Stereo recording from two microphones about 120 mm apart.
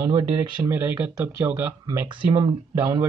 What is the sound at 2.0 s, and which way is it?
Speech, 45° right (ahead or behind).